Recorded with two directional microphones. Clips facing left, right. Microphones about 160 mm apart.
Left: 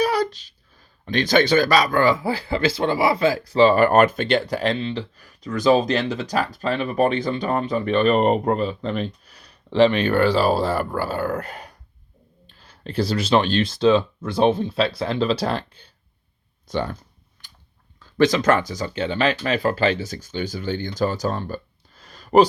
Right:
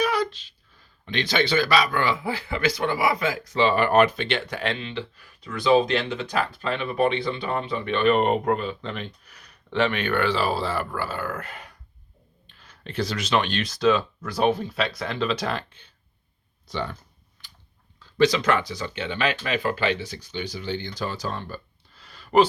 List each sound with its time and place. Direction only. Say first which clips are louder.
0.0 s speech: left 3 dB; 35° left (ahead or behind)
16.6 s speech: left 5 dB; 45° left (ahead or behind)
18.2 s speech: left 3 dB; 45° left (ahead or behind)